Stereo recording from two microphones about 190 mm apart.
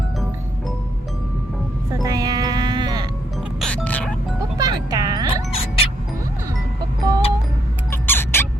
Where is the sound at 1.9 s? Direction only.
20° right (ahead or behind).